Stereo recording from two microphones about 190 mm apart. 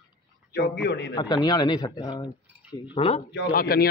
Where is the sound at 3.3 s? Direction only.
55° left (ahead or behind).